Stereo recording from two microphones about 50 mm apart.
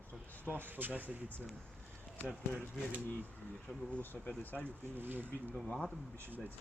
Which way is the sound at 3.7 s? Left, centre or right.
Centre.